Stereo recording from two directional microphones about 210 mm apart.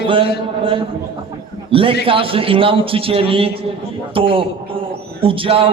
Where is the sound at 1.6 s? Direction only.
25° right (ahead or behind).